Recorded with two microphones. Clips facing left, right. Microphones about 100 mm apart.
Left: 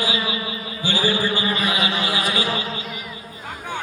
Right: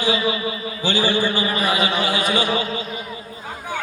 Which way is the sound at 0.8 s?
30° right (ahead or behind).